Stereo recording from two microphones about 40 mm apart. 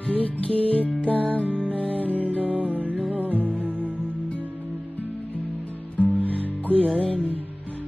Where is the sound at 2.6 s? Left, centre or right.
Right.